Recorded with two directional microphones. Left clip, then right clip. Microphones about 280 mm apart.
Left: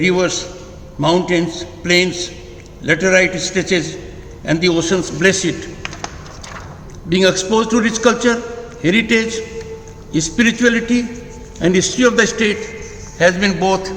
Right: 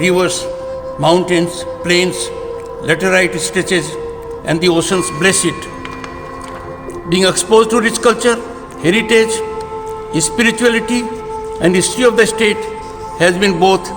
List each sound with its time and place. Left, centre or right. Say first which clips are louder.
0.0 s a man's voice: right 2 dB; right
7.1 s a man's voice: right 3 dB; right